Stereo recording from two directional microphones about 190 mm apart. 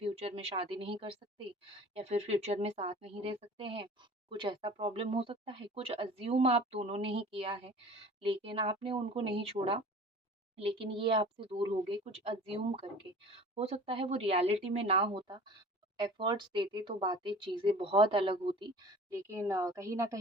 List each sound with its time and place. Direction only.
0.0 s a woman's voice: 30° right (ahead or behind)
19.1 s speech: 15° right (ahead or behind)